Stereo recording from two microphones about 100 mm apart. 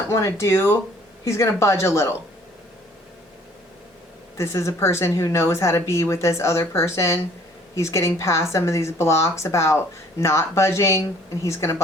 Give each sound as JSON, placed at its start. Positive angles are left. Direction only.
{"t": 0.1, "sound": "speech", "side_deg": 30}
{"t": 4.4, "sound": "speech", "side_deg": 30}